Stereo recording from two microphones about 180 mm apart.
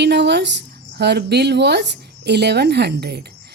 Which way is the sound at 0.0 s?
70° right (ahead or behind).